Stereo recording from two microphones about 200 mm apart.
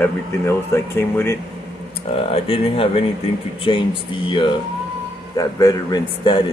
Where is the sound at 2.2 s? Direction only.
30° left (ahead or behind).